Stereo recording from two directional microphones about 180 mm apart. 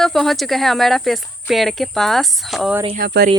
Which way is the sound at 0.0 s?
Centre (ahead or behind).